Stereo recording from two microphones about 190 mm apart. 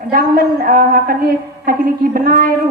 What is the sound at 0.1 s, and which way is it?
A woman's voice, 45° right (ahead or behind).